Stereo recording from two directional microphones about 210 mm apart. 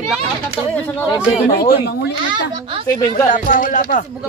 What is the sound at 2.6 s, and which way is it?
Speech, 25° right (ahead or behind).